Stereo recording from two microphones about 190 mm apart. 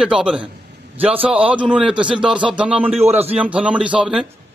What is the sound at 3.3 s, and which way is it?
Speech, 5° right (ahead or behind).